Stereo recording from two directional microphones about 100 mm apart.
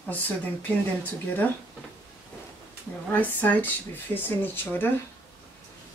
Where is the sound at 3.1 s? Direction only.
15° left (ahead or behind).